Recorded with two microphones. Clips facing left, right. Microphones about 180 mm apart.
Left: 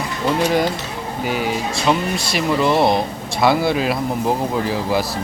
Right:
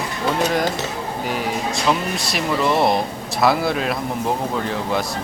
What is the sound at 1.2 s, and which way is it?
Speech, centre (ahead or behind).